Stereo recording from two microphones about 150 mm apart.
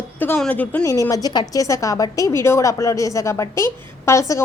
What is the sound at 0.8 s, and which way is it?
A woman's voice, 20° left (ahead or behind).